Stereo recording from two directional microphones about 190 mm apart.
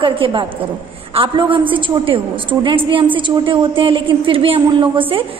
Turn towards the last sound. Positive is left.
turn(degrees=-25)  # may be behind; listen again after turning